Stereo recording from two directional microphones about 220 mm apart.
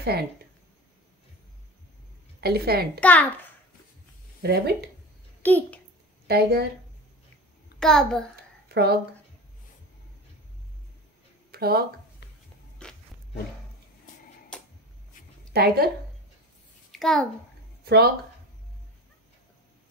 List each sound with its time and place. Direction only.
0.0 s speech: 45° right (ahead or behind)
2.4 s a woman's voice: 45° right (ahead or behind)
3.0 s a child's voice: 5° left (ahead or behind)
4.4 s speech: 45° right (ahead or behind)
5.4 s a child's voice: 10° left (ahead or behind)
6.2 s speech: 45° right (ahead or behind)
7.8 s a child's voice: 5° left (ahead or behind)
8.6 s speech: 45° right (ahead or behind)
11.5 s a sound: 45° right (ahead or behind)
12.8 s a sound: 5° left (ahead or behind)
14.5 s a sound: 5° left (ahead or behind)
15.5 s a woman's voice: 45° right (ahead or behind)
16.9 s a child's voice: centre (ahead or behind)
17.8 s speech: 45° right (ahead or behind)